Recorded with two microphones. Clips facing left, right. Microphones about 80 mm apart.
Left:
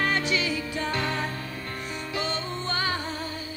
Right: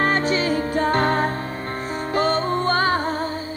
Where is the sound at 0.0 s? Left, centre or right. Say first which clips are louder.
Right 6 dB; right.